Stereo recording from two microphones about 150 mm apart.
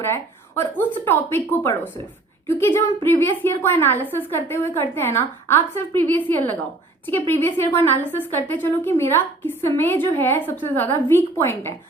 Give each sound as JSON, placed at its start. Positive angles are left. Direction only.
{"t": 0.0, "sound": "a woman's voice", "side_deg": 15}